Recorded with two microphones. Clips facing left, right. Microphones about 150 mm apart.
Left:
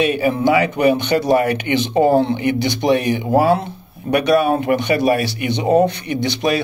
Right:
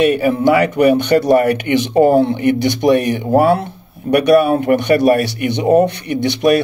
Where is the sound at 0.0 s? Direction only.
55° right (ahead or behind).